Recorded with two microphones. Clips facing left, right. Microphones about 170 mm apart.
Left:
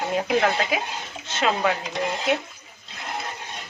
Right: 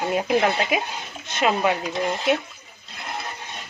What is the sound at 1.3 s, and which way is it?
Dishes, 10° right (ahead or behind).